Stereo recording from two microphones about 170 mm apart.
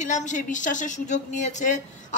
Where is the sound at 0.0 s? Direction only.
45° left (ahead or behind).